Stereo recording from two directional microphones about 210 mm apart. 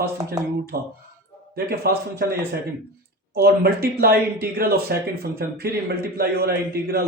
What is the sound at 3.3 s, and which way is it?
Speech, 50° right (ahead or behind).